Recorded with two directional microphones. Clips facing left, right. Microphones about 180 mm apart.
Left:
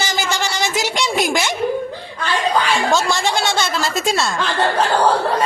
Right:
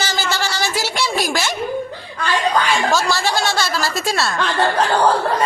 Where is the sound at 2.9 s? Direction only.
20° left (ahead or behind).